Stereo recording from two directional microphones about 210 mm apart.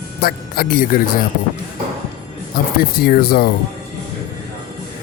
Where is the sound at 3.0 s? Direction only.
45° left (ahead or behind).